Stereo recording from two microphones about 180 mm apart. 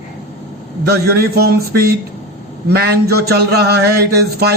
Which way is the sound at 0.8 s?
60° right (ahead or behind).